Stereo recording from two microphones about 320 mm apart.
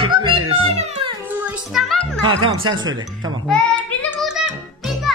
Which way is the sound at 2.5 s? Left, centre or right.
Right.